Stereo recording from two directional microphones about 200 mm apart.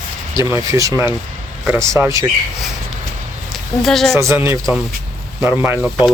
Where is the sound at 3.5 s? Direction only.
Centre (ahead or behind).